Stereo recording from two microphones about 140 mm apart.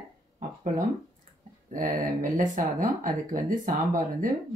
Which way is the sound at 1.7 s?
70° right (ahead or behind).